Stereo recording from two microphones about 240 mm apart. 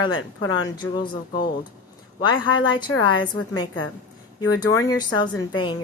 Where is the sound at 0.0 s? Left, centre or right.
Left.